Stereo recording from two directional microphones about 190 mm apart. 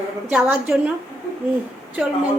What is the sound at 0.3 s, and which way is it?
Speech, 5° right (ahead or behind).